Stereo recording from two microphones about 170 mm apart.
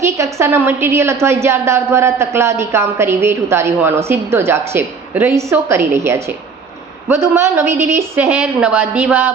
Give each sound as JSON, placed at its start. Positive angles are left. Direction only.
{"t": 0.0, "sound": "a woman's voice", "side_deg": -15}